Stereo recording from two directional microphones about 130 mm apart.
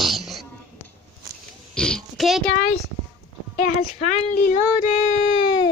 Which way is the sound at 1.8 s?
5° left (ahead or behind).